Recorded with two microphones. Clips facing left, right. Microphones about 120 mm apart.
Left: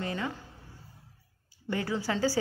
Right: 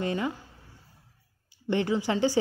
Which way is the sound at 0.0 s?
25° right (ahead or behind).